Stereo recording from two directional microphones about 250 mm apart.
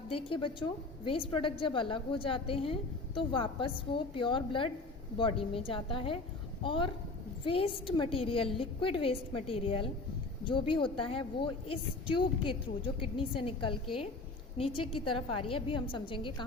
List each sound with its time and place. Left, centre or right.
0.1 s a woman's voice: left
14.9 s a woman's voice: left
15.4 s a woman's voice: left